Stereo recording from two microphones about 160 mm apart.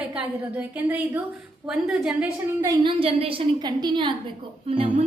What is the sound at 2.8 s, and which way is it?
A woman's voice, 35° right (ahead or behind).